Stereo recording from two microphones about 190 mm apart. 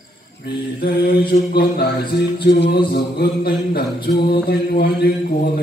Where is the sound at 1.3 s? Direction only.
55° left (ahead or behind).